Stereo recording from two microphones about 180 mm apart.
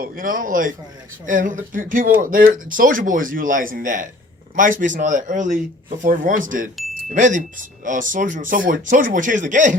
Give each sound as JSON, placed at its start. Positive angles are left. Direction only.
{"t": 0.0, "sound": "speech", "side_deg": -50}